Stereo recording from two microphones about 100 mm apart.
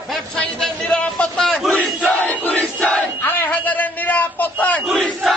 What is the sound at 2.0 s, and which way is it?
Crowd, 10° left (ahead or behind).